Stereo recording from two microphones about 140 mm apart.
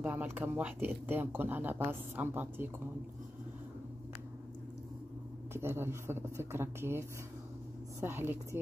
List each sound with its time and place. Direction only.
0.0 s speech: 15° right (ahead or behind)
5.5 s speech: 15° right (ahead or behind)